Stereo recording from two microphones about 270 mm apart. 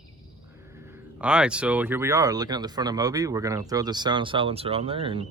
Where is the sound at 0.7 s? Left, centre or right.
Centre.